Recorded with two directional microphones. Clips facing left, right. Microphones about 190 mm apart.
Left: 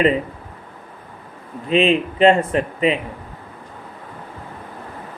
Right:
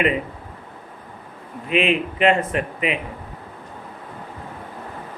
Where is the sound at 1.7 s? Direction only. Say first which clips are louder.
Left 4 dB; 30° left (ahead or behind).